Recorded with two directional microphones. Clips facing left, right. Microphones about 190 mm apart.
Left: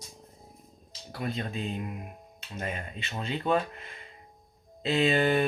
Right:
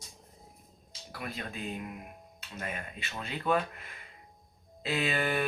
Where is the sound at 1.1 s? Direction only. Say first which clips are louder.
Left 6 dB; 25° left (ahead or behind).